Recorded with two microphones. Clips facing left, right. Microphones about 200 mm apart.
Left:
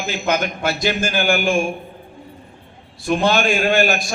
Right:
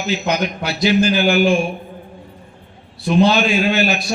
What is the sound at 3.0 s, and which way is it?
A man's voice, 50° left (ahead or behind).